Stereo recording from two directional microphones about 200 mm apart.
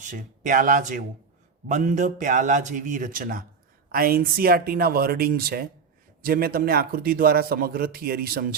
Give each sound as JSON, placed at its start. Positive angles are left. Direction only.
{"t": 0.0, "sound": "a man's voice", "side_deg": -40}